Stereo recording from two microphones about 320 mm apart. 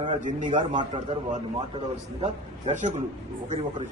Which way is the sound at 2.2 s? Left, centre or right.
Right.